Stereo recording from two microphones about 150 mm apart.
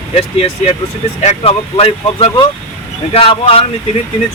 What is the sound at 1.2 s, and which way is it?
Speech, 50° left (ahead or behind).